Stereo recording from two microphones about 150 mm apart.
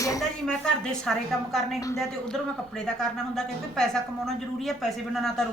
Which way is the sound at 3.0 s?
5° left (ahead or behind).